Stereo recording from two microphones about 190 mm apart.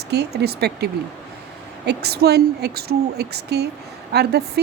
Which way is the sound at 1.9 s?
60° right (ahead or behind).